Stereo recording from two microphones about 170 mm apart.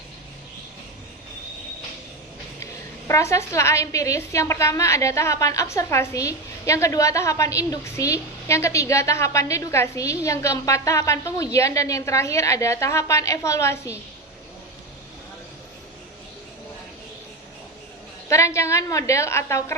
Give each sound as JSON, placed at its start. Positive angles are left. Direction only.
{"t": 3.1, "sound": "a woman's voice", "side_deg": 15}
{"t": 18.3, "sound": "a woman's voice", "side_deg": 15}